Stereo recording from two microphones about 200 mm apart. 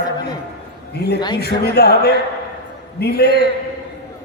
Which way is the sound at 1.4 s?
55° left (ahead or behind).